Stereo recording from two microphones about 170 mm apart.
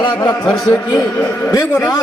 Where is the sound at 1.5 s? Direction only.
20° left (ahead or behind).